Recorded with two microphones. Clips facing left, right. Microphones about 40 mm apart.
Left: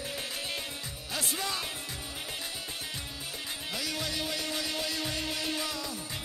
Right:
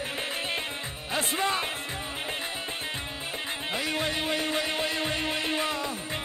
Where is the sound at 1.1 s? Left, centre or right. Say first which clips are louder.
Right 7 dB; right.